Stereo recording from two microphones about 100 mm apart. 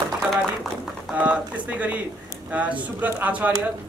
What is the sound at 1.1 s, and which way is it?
Speech, 15° right (ahead or behind).